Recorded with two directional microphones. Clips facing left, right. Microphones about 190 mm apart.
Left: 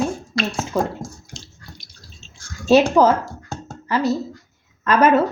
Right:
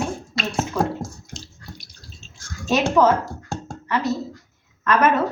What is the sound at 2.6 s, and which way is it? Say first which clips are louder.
A woman's voice: left 4 dB; 35° left (ahead or behind).